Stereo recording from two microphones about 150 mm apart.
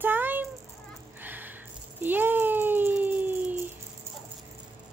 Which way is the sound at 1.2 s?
10° right (ahead or behind).